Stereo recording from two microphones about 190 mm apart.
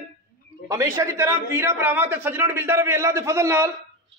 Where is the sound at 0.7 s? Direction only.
15° right (ahead or behind).